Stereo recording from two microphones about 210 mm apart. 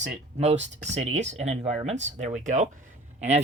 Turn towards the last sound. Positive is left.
turn(degrees=-35)  # may be behind; listen again after turning